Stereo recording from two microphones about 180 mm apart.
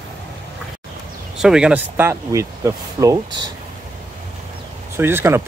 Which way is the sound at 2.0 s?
15° right (ahead or behind).